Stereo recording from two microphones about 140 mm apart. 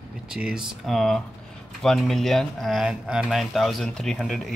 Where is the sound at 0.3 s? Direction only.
5° right (ahead or behind).